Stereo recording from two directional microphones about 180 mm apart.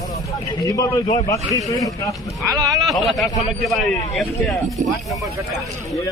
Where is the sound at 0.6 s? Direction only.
20° left (ahead or behind).